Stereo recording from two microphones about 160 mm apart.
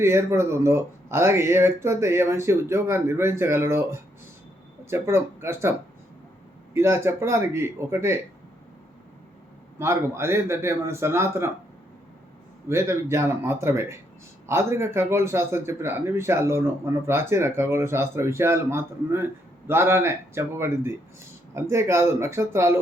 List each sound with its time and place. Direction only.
0.0 s a man's voice: 15° right (ahead or behind)
6.7 s a man's voice: 15° right (ahead or behind)
9.7 s a man's voice: 15° right (ahead or behind)
12.6 s a man's voice: 15° right (ahead or behind)